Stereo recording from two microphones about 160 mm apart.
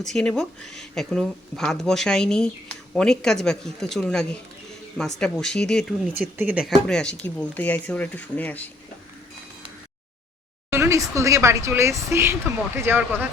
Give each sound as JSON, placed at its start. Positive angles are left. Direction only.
{"t": 0.0, "sound": "speech", "side_deg": 5}
{"t": 6.1, "sound": "speech", "side_deg": -10}
{"t": 6.8, "sound": "speech", "side_deg": 5}
{"t": 10.7, "sound": "speech", "side_deg": -15}